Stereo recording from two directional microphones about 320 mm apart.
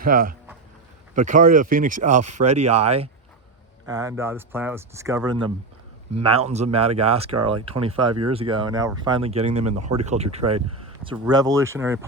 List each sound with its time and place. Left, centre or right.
0.0 s speech: right; by 11.9 s centre